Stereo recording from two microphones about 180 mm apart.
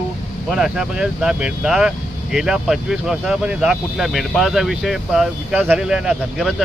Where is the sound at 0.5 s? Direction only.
5° right (ahead or behind).